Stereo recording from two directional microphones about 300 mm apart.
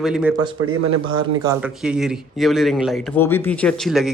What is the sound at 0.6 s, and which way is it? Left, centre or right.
Speech, right.